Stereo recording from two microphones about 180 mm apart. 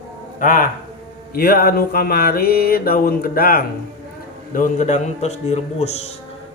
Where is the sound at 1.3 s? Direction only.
55° left (ahead or behind).